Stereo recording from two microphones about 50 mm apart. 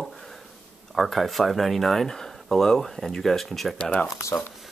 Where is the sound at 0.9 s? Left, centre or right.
Centre.